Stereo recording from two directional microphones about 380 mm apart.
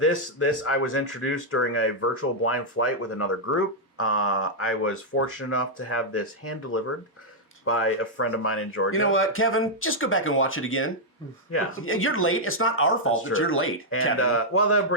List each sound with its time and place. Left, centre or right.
0.0 s speech: left